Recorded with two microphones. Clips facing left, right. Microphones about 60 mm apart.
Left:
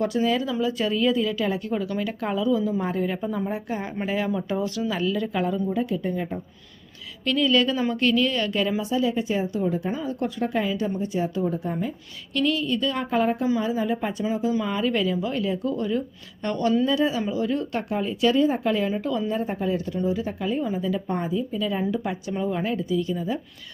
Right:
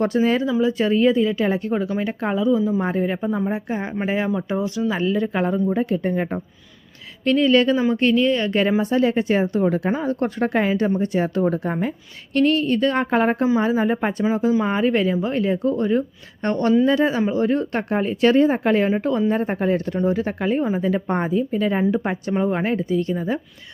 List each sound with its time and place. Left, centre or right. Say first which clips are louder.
0.0 s a woman's voice: right 4 dB; right
3.2 s a woman's voice: right 4 dB; centre; by 6.4 s right
7.3 s a woman's voice: right 5 dB; right
8.8 s a woman's voice: right 5 dB; right
9.9 s a woman's voice: right 5 dB; right
12.3 s a woman's voice: right 6 dB; right